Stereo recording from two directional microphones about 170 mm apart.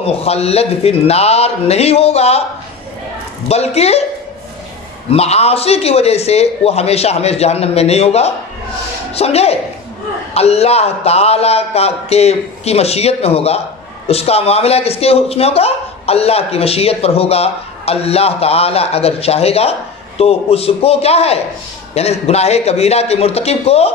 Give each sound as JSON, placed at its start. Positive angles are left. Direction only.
{"t": 0.0, "sound": "speech", "side_deg": 35}
{"t": 3.4, "sound": "speech", "side_deg": 40}
{"t": 5.1, "sound": "speech", "side_deg": 35}